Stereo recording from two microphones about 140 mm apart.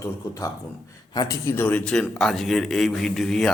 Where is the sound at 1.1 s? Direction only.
25° left (ahead or behind); by 3.5 s 5° left (ahead or behind).